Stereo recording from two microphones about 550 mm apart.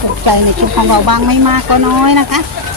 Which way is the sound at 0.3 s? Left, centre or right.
Right.